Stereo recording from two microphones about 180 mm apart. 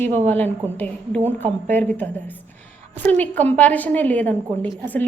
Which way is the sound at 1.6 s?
10° left (ahead or behind).